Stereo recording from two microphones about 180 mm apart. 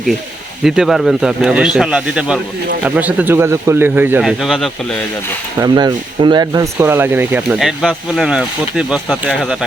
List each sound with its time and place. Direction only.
0.6 s speech: centre (ahead or behind)
5.5 s speech: 25° right (ahead or behind); by 9.6 s centre (ahead or behind)